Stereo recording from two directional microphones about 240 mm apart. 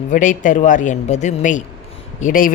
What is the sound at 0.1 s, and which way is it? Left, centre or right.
Speech, left.